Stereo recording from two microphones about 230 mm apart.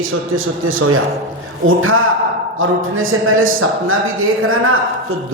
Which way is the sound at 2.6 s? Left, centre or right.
Right.